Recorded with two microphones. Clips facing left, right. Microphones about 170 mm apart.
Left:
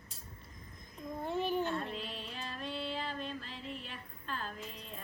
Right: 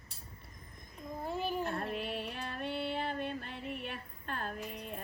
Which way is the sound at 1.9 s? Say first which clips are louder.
Right 5 dB; 60° right (ahead or behind).